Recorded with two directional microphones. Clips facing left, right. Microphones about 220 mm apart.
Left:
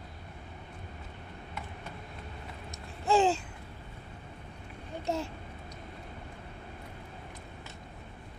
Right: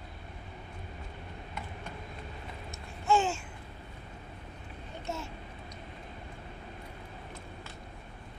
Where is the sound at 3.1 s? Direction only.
35° left (ahead or behind).